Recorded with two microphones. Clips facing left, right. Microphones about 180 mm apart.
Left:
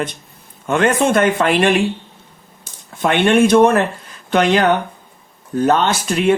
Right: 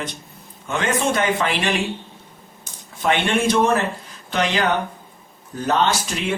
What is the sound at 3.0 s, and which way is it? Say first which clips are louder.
Speech: left 7 dB; 60° left (ahead or behind).